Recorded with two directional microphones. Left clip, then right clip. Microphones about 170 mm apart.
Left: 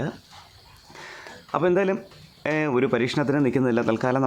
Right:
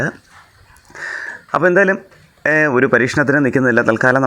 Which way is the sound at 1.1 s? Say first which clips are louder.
Right 11 dB; 20° right (ahead or behind).